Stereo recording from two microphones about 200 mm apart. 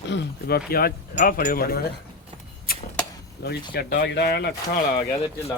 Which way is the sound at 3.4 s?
55° left (ahead or behind).